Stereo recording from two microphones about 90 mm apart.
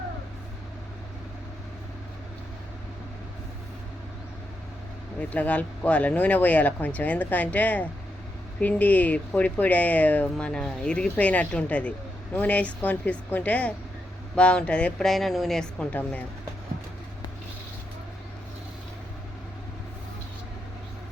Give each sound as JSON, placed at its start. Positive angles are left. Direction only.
{"t": 5.3, "sound": "speech", "side_deg": 15}
{"t": 15.9, "sound": "speech", "side_deg": 15}